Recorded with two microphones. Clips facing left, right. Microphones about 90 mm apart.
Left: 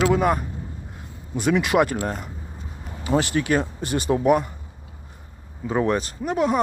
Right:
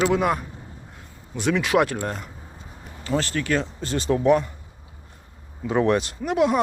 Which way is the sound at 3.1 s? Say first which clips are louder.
Left 3 dB; 15° left (ahead or behind).